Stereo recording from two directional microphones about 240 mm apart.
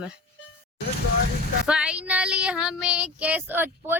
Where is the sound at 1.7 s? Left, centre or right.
Centre.